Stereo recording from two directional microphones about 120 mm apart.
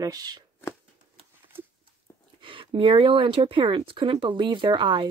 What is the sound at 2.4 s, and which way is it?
Speech, 45° right (ahead or behind).